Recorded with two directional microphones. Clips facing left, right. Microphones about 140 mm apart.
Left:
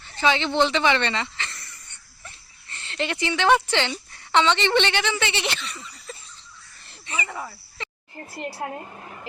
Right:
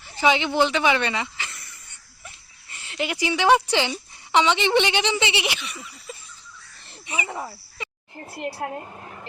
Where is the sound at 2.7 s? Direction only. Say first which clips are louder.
Even; 10° right (ahead or behind).